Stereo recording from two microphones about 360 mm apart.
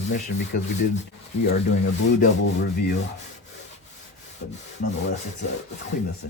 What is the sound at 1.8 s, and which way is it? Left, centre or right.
Speech, left.